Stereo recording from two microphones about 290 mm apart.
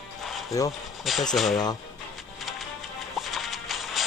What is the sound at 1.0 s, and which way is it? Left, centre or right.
Speech, centre.